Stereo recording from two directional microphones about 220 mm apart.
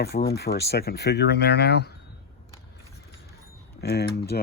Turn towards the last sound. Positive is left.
turn(degrees=45)  # may be behind; listen again after turning